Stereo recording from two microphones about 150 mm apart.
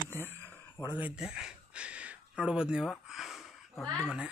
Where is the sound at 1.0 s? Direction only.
5° right (ahead or behind).